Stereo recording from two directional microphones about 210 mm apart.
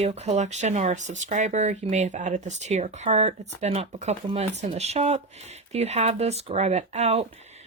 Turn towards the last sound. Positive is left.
turn(degrees=-30)  # may be behind; listen again after turning